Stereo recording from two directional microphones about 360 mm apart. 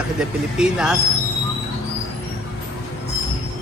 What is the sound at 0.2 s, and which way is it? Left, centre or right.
Speech, centre.